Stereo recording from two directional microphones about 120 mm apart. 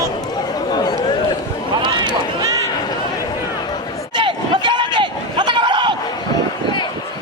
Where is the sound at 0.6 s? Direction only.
35° left (ahead or behind).